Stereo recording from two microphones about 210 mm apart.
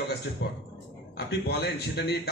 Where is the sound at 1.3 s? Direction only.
50° left (ahead or behind).